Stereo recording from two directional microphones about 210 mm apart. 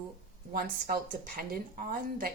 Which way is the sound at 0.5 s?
45° right (ahead or behind).